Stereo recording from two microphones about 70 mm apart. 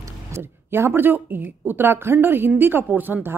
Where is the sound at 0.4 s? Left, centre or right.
Right.